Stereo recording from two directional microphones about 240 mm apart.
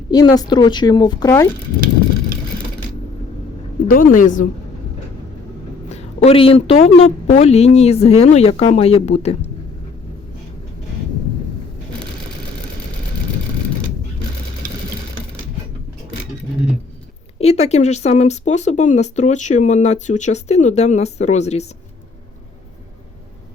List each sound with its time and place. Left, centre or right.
0.1 s a woman's voice: centre
3.8 s a woman's voice: left
5.9 s speech: left
17.3 s speech: left